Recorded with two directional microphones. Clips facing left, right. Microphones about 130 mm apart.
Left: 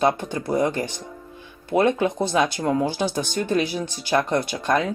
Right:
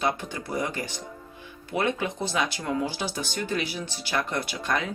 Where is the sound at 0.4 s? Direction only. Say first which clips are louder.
Left 8 dB; 45° left (ahead or behind).